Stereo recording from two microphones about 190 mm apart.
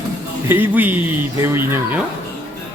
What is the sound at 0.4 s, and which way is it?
Speech, 10° right (ahead or behind).